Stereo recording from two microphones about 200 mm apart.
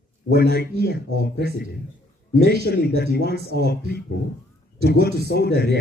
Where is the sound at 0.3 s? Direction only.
50° left (ahead or behind).